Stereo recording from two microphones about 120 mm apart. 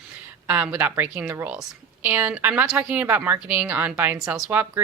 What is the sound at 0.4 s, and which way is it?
A woman's voice, 10° right (ahead or behind).